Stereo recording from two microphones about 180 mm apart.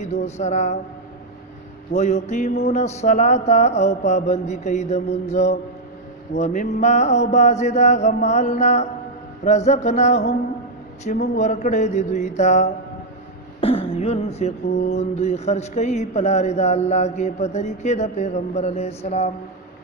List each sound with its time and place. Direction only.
0.0 s mantra: 40° left (ahead or behind)
1.9 s mantra: 40° left (ahead or behind)